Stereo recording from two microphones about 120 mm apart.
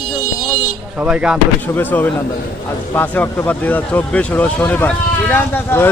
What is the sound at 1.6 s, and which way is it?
Speech, 15° left (ahead or behind).